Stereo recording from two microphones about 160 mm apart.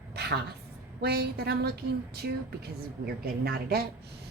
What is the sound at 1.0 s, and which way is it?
Speech, 85° right.